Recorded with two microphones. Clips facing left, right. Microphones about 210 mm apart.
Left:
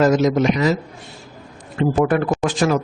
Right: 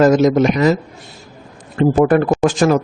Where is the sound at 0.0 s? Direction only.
50° right (ahead or behind).